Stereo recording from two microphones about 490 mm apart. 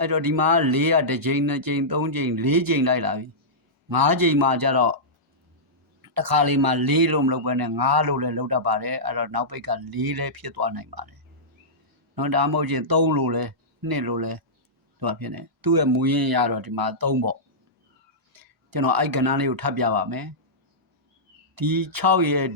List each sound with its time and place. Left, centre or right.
0.0 s a man's voice: right
6.0 s a man's voice: right
12.1 s a man's voice: right
18.3 s speech: right
21.5 s a man's voice: right